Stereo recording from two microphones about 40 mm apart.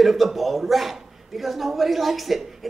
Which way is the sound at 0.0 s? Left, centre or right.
Centre.